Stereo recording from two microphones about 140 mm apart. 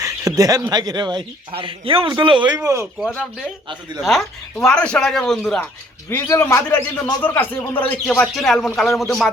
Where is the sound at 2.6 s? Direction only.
20° right (ahead or behind).